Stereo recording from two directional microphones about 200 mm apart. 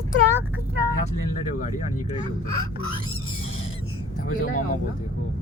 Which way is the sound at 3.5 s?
90° left.